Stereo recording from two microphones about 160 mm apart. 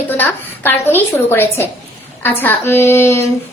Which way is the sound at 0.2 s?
10° left (ahead or behind).